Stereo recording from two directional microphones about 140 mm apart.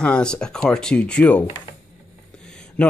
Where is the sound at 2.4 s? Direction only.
5° left (ahead or behind).